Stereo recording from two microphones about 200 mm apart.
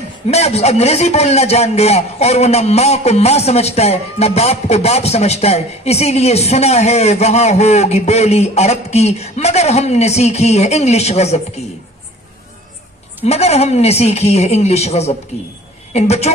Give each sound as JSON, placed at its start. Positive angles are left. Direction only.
{"t": 0.3, "sound": "a man's voice", "side_deg": 30}
{"t": 13.2, "sound": "a man's voice", "side_deg": 30}